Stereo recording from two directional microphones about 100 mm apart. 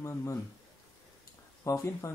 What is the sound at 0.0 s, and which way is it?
Speech, 30° left (ahead or behind).